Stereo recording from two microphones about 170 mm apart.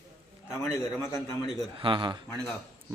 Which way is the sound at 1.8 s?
30° right (ahead or behind).